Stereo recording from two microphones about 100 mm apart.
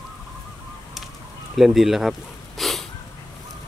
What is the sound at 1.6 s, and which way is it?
Speech, 5° right (ahead or behind).